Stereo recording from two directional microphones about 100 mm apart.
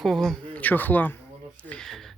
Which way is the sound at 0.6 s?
20° left (ahead or behind).